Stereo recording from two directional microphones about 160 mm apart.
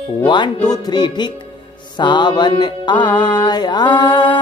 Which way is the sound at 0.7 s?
25° left (ahead or behind).